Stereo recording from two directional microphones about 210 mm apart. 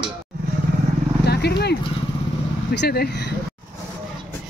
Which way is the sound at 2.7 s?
50° left (ahead or behind).